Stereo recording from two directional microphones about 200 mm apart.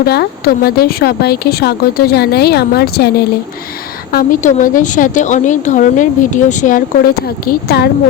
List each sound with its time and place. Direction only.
0.0 s a woman's voice: 50° left (ahead or behind)